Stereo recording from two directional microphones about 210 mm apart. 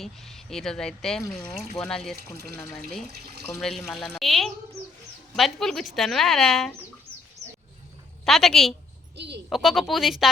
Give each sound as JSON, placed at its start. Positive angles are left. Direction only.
{"t": 0.0, "sound": "speech", "side_deg": 0}
{"t": 8.2, "sound": "speech", "side_deg": 0}
{"t": 9.1, "sound": "speech", "side_deg": -55}
{"t": 9.5, "sound": "speech", "side_deg": 0}